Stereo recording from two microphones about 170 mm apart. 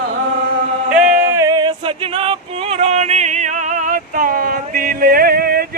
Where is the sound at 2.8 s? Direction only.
40° right (ahead or behind).